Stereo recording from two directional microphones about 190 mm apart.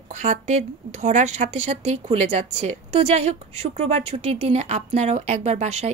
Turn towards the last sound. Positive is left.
turn(degrees=-35)  # may be behind; listen again after turning